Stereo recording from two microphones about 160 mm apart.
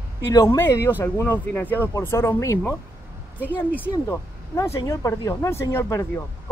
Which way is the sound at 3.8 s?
15° left (ahead or behind).